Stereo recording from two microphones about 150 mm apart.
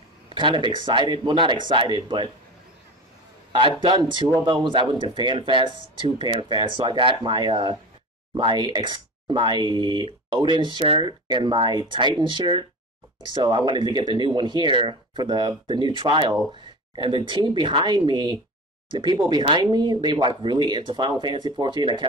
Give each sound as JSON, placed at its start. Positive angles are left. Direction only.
{"t": 0.3, "sound": "speech", "side_deg": -30}
{"t": 3.5, "sound": "speech", "side_deg": -30}